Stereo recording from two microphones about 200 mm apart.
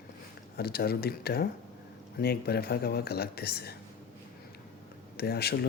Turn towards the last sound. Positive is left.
turn(degrees=55)  # may be behind; listen again after turning